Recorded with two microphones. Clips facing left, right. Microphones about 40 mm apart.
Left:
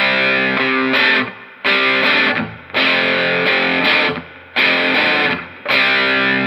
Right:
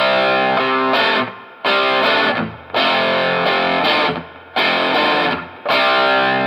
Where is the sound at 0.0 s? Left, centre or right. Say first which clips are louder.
Even; left.